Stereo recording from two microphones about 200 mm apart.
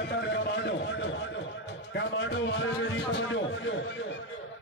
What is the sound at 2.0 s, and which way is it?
Speech, 65° left (ahead or behind).